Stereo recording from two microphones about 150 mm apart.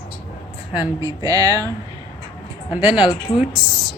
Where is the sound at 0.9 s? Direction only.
20° right (ahead or behind).